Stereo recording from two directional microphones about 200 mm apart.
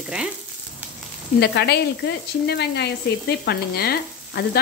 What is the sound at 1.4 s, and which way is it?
Speech, 55° left (ahead or behind).